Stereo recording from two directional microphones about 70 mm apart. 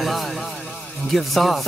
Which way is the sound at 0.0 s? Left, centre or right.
Centre.